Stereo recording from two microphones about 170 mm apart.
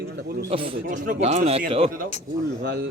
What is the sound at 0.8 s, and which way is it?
Speech, 55° right (ahead or behind).